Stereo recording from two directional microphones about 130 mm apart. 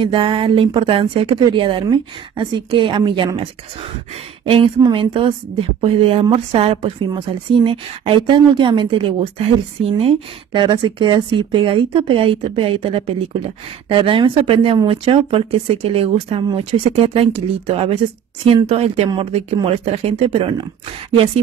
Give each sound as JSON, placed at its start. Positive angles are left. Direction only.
{"t": 0.0, "sound": "speech", "side_deg": -40}
{"t": 4.5, "sound": "a woman's voice", "side_deg": -40}